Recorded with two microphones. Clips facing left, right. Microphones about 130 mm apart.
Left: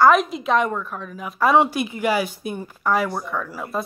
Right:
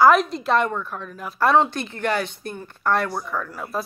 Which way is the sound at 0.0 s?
Centre (ahead or behind).